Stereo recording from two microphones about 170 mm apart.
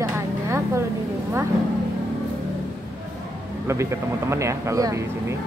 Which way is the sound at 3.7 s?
15° right (ahead or behind).